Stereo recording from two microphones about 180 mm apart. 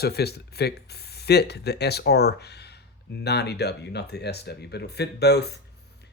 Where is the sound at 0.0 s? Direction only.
65° left (ahead or behind).